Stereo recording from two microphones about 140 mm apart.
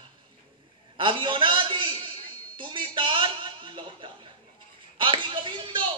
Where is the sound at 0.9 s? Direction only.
35° right (ahead or behind).